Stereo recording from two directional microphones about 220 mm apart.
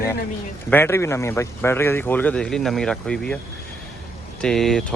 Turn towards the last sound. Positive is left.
turn(degrees=0)  # may be behind; listen again after turning